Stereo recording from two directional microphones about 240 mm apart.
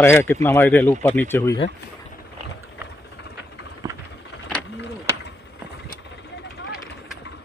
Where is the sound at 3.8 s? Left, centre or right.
Centre.